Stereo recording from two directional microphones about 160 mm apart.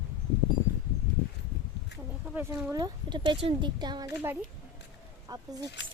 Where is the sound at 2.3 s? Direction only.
15° right (ahead or behind).